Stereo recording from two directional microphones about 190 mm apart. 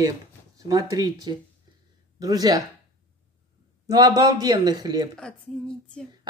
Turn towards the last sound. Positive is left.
turn(degrees=5)  # may be behind; listen again after turning